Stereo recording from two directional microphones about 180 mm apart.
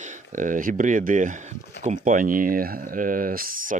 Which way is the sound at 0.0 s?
45° right (ahead or behind).